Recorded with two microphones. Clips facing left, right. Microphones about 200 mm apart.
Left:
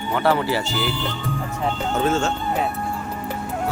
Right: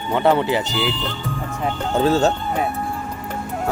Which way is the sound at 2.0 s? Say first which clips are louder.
Right 5 dB; 35° right (ahead or behind).